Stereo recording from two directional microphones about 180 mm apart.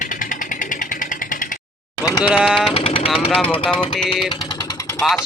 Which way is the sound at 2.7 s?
35° left (ahead or behind).